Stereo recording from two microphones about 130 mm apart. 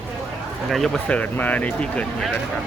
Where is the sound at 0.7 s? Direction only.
Centre (ahead or behind).